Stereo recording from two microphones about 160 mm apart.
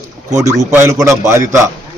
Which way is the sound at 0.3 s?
20° right (ahead or behind).